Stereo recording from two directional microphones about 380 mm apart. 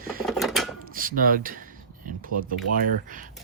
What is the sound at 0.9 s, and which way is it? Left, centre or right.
Speech, right.